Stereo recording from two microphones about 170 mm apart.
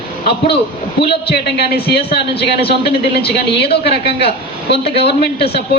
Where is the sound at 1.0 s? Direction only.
70° left (ahead or behind).